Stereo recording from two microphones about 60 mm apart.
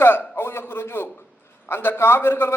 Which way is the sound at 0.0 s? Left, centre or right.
Left.